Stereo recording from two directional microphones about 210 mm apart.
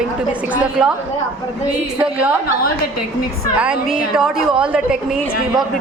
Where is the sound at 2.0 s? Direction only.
5° right (ahead or behind).